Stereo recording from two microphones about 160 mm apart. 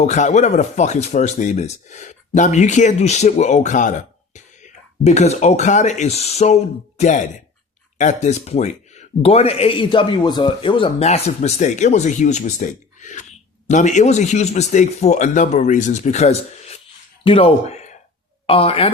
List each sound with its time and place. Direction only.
0.0 s a man's voice: 50° left (ahead or behind)